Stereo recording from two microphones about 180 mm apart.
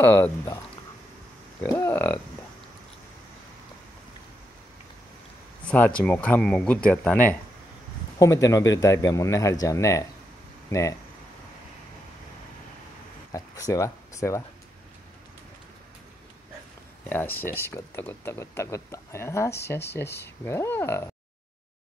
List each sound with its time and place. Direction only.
0.0 s speech: 10° left (ahead or behind)
1.6 s speech: 15° left (ahead or behind)
5.7 s speech: 5° left (ahead or behind)
13.3 s speech: 20° left (ahead or behind)
17.1 s speech: 10° left (ahead or behind)